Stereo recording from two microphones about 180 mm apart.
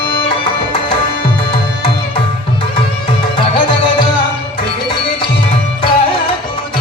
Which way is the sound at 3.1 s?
30° left (ahead or behind).